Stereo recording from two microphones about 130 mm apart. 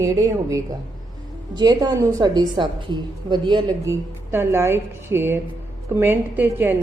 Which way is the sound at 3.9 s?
20° right (ahead or behind).